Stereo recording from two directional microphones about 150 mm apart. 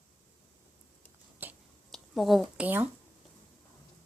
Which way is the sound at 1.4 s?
10° right (ahead or behind).